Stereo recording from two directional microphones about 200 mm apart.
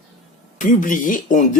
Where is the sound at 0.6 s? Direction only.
40° left (ahead or behind).